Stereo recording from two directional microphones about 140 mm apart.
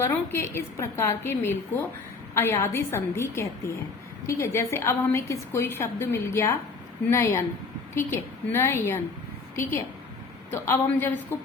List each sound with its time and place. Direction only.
0.3 s a woman's voice: 15° left (ahead or behind)